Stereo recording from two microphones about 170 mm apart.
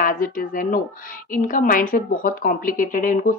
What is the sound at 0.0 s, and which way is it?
A woman's voice, 55° left (ahead or behind).